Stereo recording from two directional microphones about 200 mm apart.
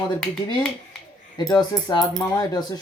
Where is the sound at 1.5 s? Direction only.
20° left (ahead or behind).